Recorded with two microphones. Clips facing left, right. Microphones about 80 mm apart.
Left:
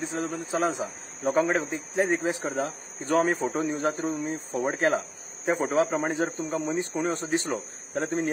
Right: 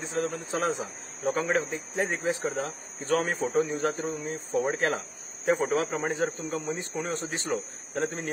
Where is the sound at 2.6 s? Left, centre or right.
Left.